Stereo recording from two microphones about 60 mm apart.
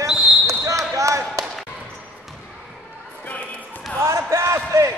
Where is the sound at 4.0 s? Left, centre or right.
Right.